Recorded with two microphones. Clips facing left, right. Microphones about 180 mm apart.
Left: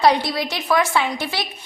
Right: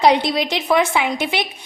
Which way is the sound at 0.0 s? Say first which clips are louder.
Right 2 dB; 20° right (ahead or behind).